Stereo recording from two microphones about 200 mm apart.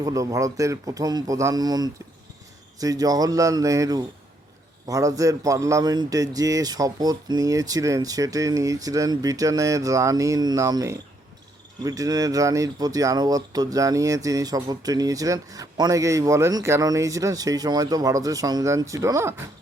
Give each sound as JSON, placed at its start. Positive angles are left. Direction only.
{"t": 0.0, "sound": "speech", "side_deg": -15}